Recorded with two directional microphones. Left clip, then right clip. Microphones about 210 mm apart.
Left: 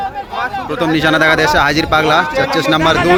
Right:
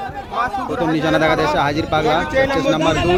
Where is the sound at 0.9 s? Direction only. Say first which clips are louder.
Left 5 dB; centre (ahead or behind).